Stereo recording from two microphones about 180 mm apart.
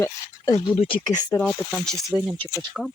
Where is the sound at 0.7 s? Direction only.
30° left (ahead or behind).